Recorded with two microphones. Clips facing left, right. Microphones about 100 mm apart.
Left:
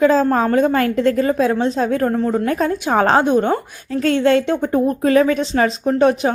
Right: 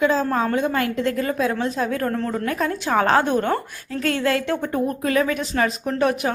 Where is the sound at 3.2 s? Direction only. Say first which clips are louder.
Left 5 dB; 20° left (ahead or behind).